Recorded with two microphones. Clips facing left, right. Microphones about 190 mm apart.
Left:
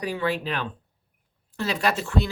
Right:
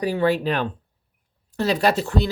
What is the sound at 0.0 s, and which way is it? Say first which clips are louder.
Speech: right 6 dB; 35° right (ahead or behind).